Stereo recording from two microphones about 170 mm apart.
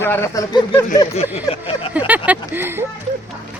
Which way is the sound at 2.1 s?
10° right (ahead or behind).